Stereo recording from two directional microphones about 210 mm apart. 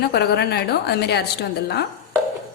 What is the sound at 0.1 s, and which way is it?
A woman's voice, 50° left (ahead or behind).